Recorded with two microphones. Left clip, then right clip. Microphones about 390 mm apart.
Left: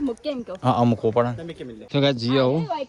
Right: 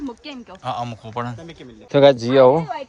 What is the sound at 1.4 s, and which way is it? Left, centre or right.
Speech, right.